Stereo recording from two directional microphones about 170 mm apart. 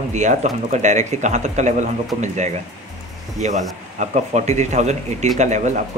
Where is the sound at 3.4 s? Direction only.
45° right (ahead or behind).